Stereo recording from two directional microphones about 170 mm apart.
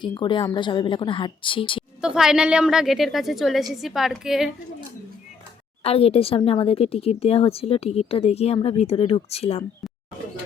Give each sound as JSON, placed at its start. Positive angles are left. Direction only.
{"t": 0.0, "sound": "a woman's voice", "side_deg": 25}
{"t": 2.0, "sound": "a woman's voice", "side_deg": -5}
{"t": 5.8, "sound": "speech", "side_deg": 35}